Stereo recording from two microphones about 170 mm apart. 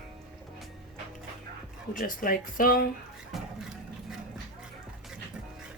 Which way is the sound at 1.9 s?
55° left (ahead or behind).